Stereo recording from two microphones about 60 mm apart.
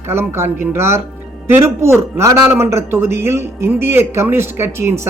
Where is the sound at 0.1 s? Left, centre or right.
Right.